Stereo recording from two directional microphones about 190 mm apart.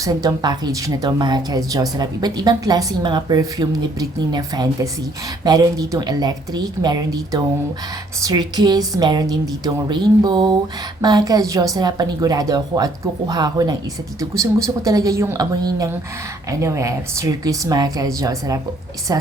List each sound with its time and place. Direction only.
0.0 s speech: 20° right (ahead or behind)